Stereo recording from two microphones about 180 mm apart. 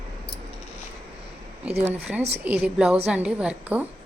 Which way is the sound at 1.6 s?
10° right (ahead or behind).